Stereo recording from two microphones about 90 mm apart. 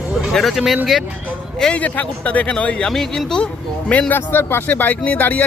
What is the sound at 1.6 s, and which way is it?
Speech, 15° left (ahead or behind).